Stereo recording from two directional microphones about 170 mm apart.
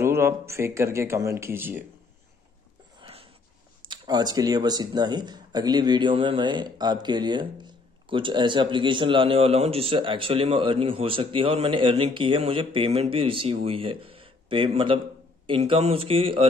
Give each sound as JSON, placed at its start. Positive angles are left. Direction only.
{"t": 0.0, "sound": "speech", "side_deg": -15}
{"t": 3.0, "sound": "a sound", "side_deg": -35}
{"t": 3.9, "sound": "speech", "side_deg": -25}